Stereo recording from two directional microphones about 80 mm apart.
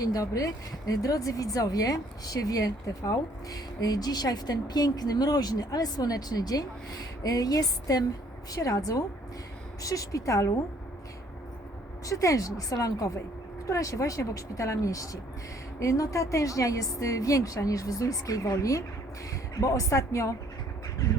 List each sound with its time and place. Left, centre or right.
0.0 s speech: left
12.0 s speech: left